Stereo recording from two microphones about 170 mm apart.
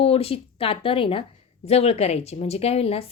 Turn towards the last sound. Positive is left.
turn(degrees=35)  # may be behind; listen again after turning